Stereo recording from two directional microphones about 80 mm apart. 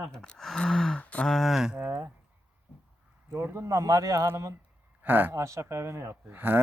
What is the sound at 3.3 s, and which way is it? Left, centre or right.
Speech, right.